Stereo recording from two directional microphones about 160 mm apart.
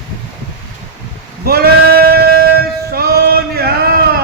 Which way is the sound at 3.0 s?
75° right (ahead or behind).